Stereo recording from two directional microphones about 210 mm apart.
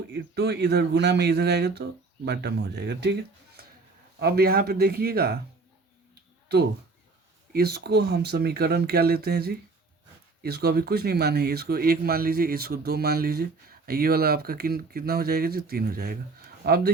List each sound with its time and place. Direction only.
0.1 s speech: 50° right (ahead or behind)
7.5 s speech: 50° right (ahead or behind)